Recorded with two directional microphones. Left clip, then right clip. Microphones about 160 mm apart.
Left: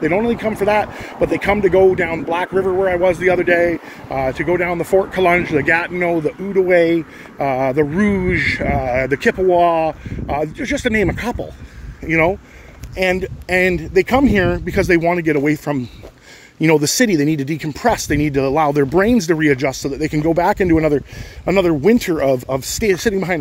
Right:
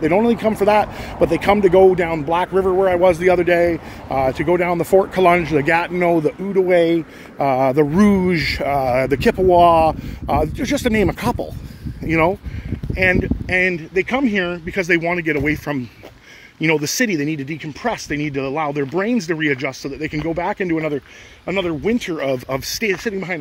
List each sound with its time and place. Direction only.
0.1 s speech: 25° right (ahead or behind)
6.5 s speech: centre (ahead or behind)
7.3 s speech: 20° right (ahead or behind)
12.9 s speech: 15° left (ahead or behind)
13.5 s speech: 30° left (ahead or behind); by 22.1 s 50° left (ahead or behind)
22.1 s speech: 30° left (ahead or behind)
22.5 s speech: 20° left (ahead or behind)
22.9 s speech: 40° left (ahead or behind)